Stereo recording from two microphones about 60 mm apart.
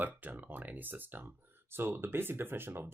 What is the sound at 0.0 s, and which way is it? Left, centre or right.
Speech, right.